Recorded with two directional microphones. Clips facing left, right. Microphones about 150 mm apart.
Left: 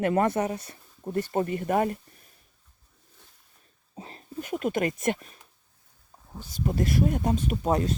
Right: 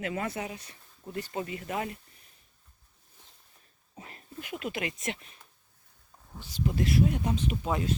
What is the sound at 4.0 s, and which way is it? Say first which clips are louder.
Speech: left 6 dB; 30° left (ahead or behind).